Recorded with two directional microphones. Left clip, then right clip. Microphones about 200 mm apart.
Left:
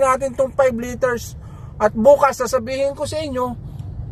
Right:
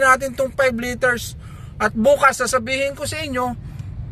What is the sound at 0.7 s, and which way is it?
A man's voice, 15° right (ahead or behind).